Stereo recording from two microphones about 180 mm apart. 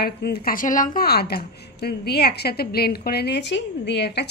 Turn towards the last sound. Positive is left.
turn(degrees=70)  # may be behind; listen again after turning